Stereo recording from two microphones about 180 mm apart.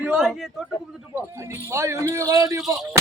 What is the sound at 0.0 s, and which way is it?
Speech, centre (ahead or behind).